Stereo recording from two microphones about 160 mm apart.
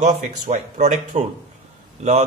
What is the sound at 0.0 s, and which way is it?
A man's voice, 45° right (ahead or behind).